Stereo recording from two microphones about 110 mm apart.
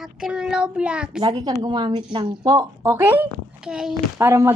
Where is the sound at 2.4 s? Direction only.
30° right (ahead or behind).